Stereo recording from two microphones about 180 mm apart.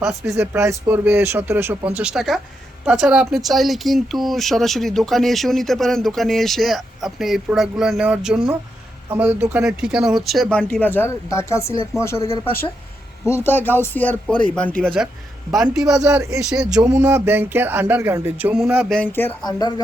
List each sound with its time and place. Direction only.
0.0 s speech: centre (ahead or behind)
0.3 s speech: 15° right (ahead or behind)
15.9 s speech: 15° right (ahead or behind)
16.4 s speech: 5° right (ahead or behind)
16.6 s speech: 20° right (ahead or behind); by 18.9 s 5° right (ahead or behind)
18.9 s speech: 10° left (ahead or behind)
19.5 s speech: 20° left (ahead or behind)